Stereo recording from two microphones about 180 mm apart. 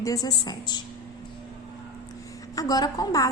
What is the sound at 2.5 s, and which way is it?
Speech, 20° left (ahead or behind).